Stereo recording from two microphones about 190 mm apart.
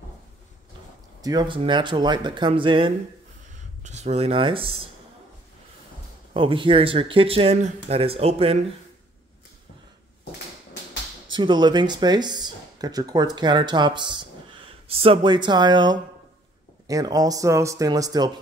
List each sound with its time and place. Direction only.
1.2 s speech: 20° right (ahead or behind)
3.8 s speech: 35° right (ahead or behind)
6.3 s speech: 25° right (ahead or behind)
11.3 s speech: 25° right (ahead or behind)